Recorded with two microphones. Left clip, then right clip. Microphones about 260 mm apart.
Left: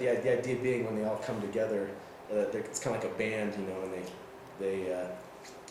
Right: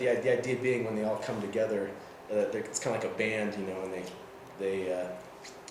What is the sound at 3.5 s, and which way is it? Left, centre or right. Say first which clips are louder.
Speech: right 1 dB; right.